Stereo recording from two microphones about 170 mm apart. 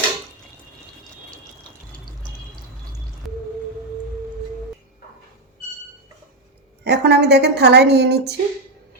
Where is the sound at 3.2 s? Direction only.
Centre (ahead or behind).